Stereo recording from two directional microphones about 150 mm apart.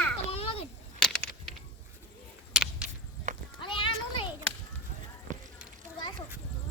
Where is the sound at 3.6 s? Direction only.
35° left (ahead or behind).